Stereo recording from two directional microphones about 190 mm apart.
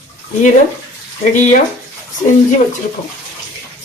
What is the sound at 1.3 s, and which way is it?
Speech, 40° left (ahead or behind).